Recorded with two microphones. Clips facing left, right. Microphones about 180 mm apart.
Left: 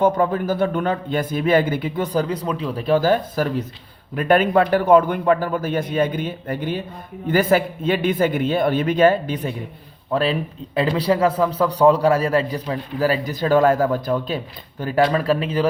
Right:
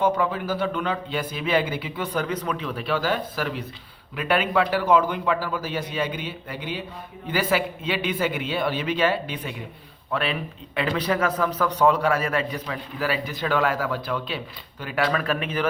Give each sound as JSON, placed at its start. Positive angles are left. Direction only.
{"t": 0.0, "sound": "a man's voice", "side_deg": 45}
{"t": 2.5, "sound": "a man's voice", "side_deg": 35}
{"t": 15.0, "sound": "a man's voice", "side_deg": 30}